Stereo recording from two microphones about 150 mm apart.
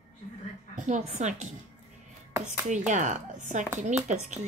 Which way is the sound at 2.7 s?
55° right (ahead or behind).